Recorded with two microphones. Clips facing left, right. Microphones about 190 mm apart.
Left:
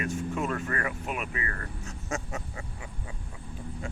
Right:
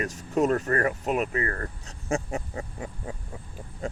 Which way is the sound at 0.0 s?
40° right (ahead or behind).